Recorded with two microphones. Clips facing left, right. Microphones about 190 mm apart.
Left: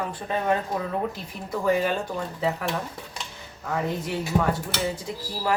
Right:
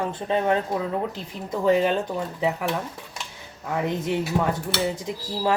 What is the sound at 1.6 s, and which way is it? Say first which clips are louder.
Speech: right 3 dB; 25° right (ahead or behind).